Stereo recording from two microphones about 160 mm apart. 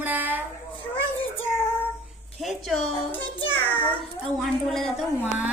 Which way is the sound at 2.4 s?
Centre (ahead or behind).